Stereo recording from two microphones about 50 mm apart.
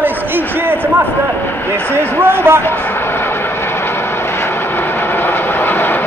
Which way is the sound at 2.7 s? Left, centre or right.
Left.